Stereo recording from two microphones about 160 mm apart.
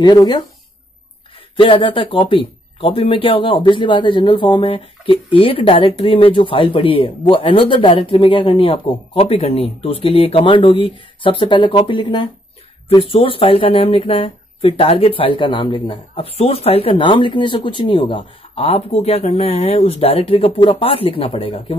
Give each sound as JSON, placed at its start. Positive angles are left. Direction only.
{"t": 0.0, "sound": "speech", "side_deg": 25}
{"t": 1.6, "sound": "speech", "side_deg": 30}